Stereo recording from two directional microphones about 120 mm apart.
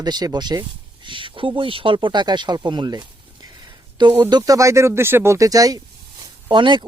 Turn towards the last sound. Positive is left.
turn(degrees=-40)  # may be behind; listen again after turning